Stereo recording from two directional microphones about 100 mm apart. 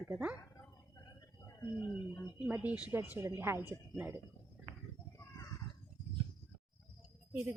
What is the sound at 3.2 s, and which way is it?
Speech, 25° right (ahead or behind).